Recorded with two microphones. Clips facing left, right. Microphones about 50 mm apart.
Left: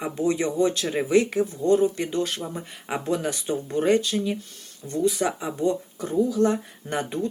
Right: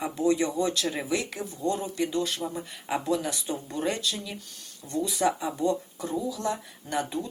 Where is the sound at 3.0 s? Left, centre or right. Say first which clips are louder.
Left 5 dB; left.